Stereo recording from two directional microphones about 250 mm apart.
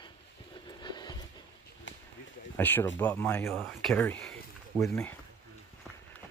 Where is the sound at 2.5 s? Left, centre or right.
Centre.